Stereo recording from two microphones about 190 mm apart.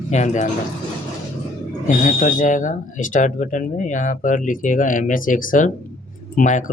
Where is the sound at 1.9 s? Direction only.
45° left (ahead or behind).